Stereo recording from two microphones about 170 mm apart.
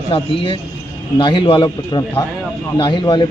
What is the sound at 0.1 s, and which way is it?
Speech, 30° left (ahead or behind).